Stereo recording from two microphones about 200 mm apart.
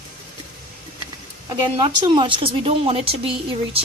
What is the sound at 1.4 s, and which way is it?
A woman's voice, 20° right (ahead or behind).